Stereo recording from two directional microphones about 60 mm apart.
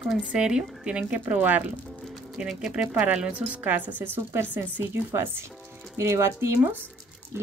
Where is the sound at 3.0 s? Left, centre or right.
Right.